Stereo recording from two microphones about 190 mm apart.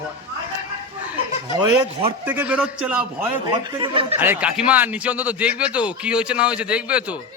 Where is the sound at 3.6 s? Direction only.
25° right (ahead or behind).